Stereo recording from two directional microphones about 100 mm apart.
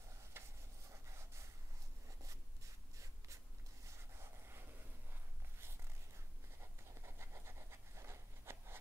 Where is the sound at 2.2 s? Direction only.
30° right (ahead or behind).